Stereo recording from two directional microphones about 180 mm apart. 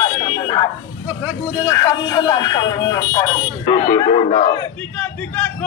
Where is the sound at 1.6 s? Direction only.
20° left (ahead or behind).